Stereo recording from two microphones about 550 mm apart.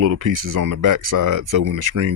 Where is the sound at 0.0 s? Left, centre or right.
Right.